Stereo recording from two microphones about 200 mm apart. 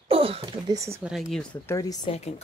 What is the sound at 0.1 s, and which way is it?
Speech, 30° right (ahead or behind).